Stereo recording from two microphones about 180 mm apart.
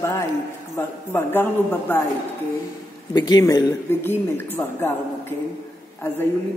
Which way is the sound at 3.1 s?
20° left (ahead or behind).